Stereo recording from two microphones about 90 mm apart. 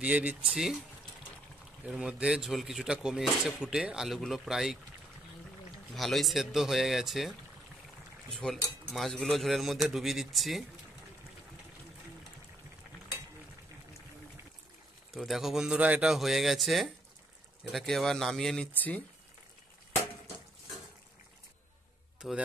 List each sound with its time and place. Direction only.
0.0 s speech: 15° right (ahead or behind)
1.9 s speech: 15° right (ahead or behind)
5.9 s speech: centre (ahead or behind)
15.1 s speech: centre (ahead or behind)
18.7 s speech: 20° left (ahead or behind)
22.2 s speech: centre (ahead or behind)